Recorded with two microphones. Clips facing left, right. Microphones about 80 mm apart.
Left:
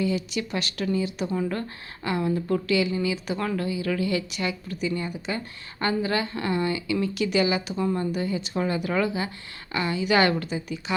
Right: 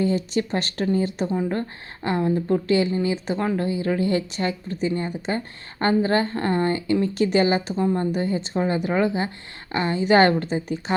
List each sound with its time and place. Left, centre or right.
0.0 s a woman's voice: right
1.3 s a woman's voice: right